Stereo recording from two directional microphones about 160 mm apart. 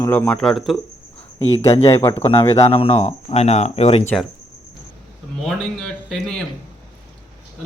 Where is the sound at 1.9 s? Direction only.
20° left (ahead or behind).